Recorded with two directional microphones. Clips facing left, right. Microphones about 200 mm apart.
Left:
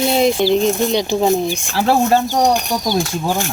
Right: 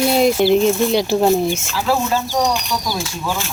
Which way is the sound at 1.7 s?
55° left (ahead or behind).